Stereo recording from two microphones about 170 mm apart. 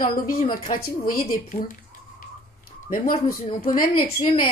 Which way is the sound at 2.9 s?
55° left (ahead or behind).